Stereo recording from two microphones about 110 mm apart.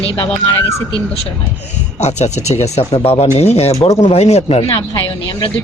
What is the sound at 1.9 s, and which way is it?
Speech, 90° left.